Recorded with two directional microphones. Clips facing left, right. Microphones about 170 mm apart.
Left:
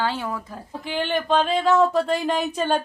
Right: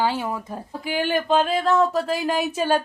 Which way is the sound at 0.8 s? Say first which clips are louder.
Right 1 dB; 5° right (ahead or behind).